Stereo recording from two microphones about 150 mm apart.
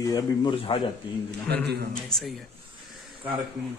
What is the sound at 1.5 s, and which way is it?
Speech, 90° right.